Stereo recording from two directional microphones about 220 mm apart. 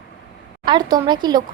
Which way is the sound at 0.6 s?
20° right (ahead or behind).